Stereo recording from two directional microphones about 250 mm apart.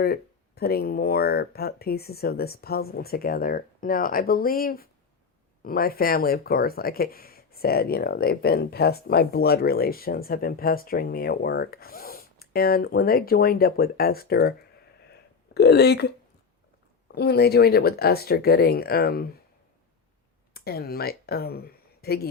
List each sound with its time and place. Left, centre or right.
0.0 s speech: left
15.1 s a sound: left
17.2 s speech: left
20.5 s speech: left